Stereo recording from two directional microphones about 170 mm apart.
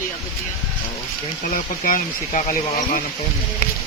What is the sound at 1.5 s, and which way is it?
Speech, 55° left (ahead or behind).